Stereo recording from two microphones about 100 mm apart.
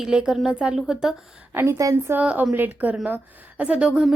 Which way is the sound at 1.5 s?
30° right (ahead or behind).